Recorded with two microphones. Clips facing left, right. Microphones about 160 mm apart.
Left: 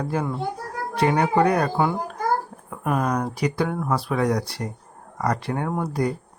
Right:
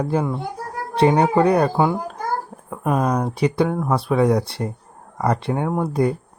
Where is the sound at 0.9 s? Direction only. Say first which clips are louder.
Right 4 dB; 25° right (ahead or behind).